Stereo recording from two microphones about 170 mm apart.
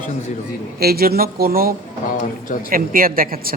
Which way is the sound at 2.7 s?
55° right (ahead or behind).